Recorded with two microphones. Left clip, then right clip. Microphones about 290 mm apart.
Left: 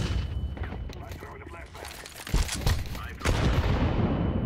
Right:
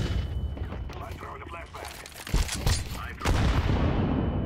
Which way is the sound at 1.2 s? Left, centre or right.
Centre.